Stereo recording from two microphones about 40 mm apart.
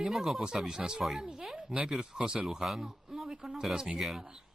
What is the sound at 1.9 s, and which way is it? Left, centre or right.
Speech, centre.